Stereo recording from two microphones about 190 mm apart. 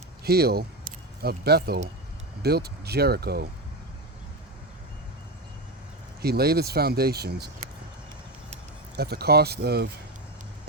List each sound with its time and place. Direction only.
0.3 s speech: 55° right (ahead or behind)
6.2 s speech: 55° right (ahead or behind)
9.0 s speech: 55° right (ahead or behind)